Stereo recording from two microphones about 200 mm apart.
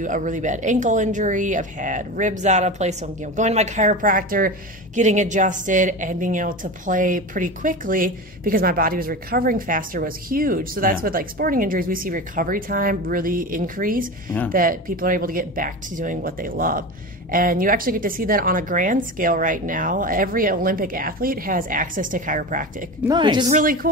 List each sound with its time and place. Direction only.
0.0 s a woman's voice: 40° right (ahead or behind)
23.0 s a woman's voice: 25° right (ahead or behind)
23.5 s a woman's voice: 45° right (ahead or behind)